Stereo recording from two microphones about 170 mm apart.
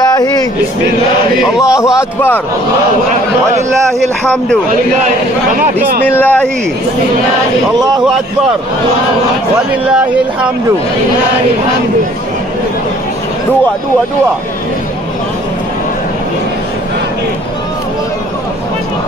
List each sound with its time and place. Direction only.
0.1 s vehicle: 20° left (ahead or behind)
1.4 s speech: 5° right (ahead or behind)
2.0 s a man's voice: 10° left (ahead or behind)
6.1 s a man's voice: 10° left (ahead or behind)